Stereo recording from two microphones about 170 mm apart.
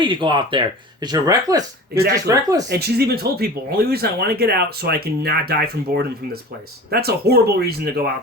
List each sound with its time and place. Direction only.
0.0 s speech: 30° right (ahead or behind)
2.6 s speech: 70° right (ahead or behind)